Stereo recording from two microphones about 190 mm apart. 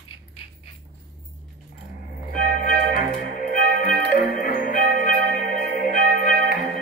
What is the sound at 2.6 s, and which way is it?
Music, 45° left (ahead or behind).